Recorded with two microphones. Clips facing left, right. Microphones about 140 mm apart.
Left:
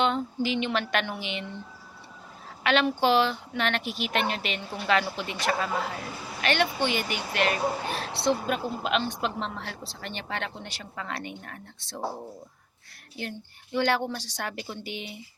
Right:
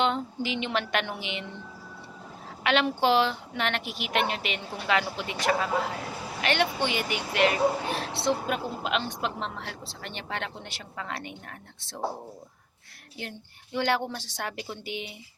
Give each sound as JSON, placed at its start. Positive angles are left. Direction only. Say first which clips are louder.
{"t": 0.0, "sound": "speech", "louder": "left 1 dB", "side_deg": -20}
{"t": 2.6, "sound": "speech", "louder": "left 1 dB", "side_deg": -20}
{"t": 13.7, "sound": "speech", "louder": "left 1 dB", "side_deg": -20}